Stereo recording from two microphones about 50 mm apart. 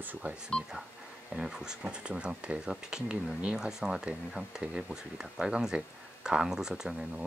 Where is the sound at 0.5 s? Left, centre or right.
Centre.